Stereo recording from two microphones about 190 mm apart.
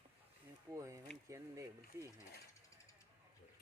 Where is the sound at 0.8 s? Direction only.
15° right (ahead or behind).